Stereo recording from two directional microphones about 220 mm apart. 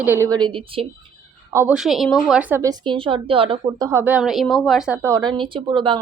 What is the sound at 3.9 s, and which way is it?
A woman's voice, 10° right (ahead or behind).